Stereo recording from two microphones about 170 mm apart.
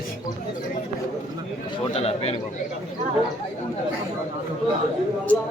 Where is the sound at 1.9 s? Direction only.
35° left (ahead or behind).